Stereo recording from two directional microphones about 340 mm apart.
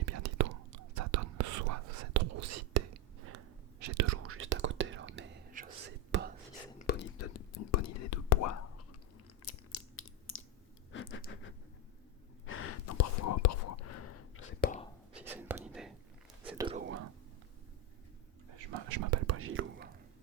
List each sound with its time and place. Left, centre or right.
0.0 s whispering: right
6.7 s whispering: left
7.3 s whispering: left
9.4 s a sound: left
12.5 s whispering: left
14.6 s whispering: centre
15.1 s whispering: centre
16.5 s whispering: centre
18.9 s whispering: right
19.1 s whispering: right